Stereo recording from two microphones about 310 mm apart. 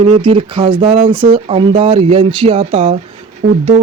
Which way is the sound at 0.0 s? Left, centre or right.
Centre.